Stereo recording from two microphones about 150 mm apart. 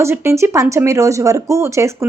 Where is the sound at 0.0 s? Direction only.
20° right (ahead or behind).